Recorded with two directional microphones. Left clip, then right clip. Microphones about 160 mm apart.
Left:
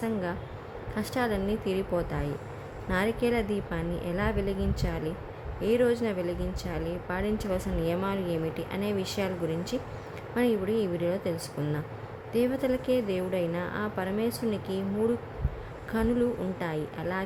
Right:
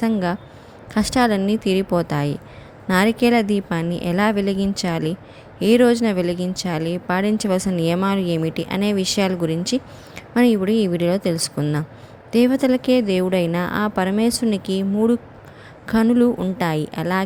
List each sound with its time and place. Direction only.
0.0 s speech: 45° right (ahead or behind)